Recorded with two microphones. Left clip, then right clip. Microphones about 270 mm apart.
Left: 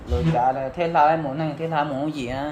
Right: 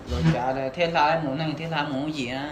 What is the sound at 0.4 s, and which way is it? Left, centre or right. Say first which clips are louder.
A man's voice: left 3 dB; centre.